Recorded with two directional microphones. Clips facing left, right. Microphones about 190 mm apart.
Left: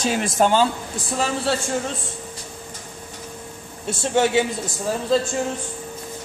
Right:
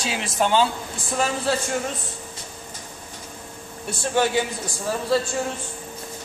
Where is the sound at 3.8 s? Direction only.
20° left (ahead or behind).